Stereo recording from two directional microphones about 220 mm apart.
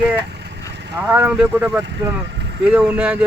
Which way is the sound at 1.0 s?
10° right (ahead or behind).